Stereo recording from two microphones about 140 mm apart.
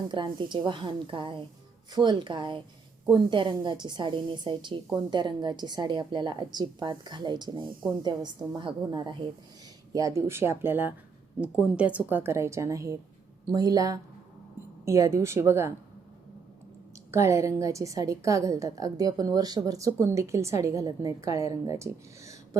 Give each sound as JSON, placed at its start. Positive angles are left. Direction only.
{"t": 0.1, "sound": "a woman's voice", "side_deg": -35}
{"t": 9.9, "sound": "a woman's voice", "side_deg": -20}
{"t": 17.1, "sound": "a woman's voice", "side_deg": -20}